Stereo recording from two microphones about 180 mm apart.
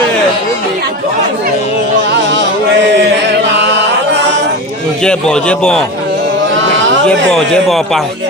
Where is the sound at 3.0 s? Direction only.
75° right (ahead or behind).